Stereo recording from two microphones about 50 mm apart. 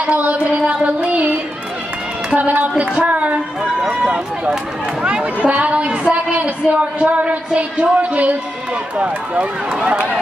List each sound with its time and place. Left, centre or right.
0.0 s music: right
2.3 s a woman's voice: right
3.9 s run: right
5.0 s a woman's voice: right